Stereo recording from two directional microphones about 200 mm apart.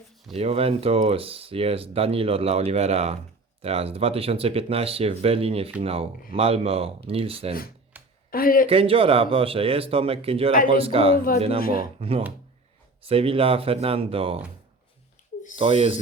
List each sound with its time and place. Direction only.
0.3 s speech: 30° right (ahead or behind)
7.9 s a sound: 10° right (ahead or behind)
8.3 s speech: 45° left (ahead or behind)
8.6 s speech: 30° right (ahead or behind)
11.6 s speech: 45° left (ahead or behind)
11.9 s speech: 30° right (ahead or behind)
15.5 s speech: 25° right (ahead or behind)